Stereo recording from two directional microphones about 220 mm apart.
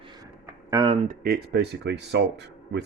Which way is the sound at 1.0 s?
45° right (ahead or behind).